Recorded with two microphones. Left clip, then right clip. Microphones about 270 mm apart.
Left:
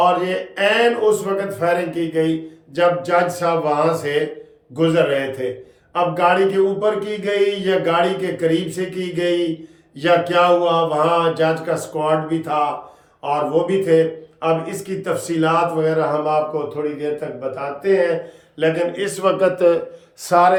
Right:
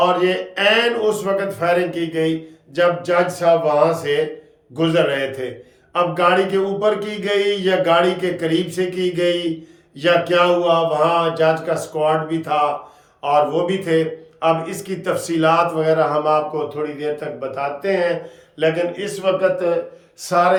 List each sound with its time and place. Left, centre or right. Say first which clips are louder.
0.0 s a man's voice: even; centre
19.2 s a man's voice: left 2 dB; left
20.3 s speech: left 3 dB; centre